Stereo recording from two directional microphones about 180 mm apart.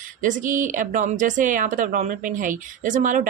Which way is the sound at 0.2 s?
45° right (ahead or behind).